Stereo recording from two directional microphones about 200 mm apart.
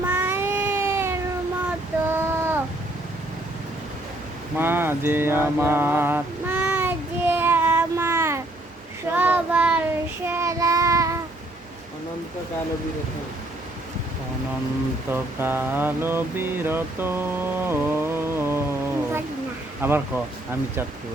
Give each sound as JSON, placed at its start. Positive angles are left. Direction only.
{"t": 0.0, "sound": "child singing", "side_deg": -10}
{"t": 4.5, "sound": "mantra", "side_deg": -10}
{"t": 9.1, "sound": "child singing", "side_deg": -10}
{"t": 15.1, "sound": "a sound", "side_deg": -10}
{"t": 19.8, "sound": "speech", "side_deg": -10}